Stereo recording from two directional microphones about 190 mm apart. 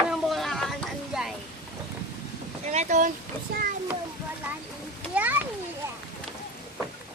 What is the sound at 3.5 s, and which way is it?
Speech, 55° right (ahead or behind).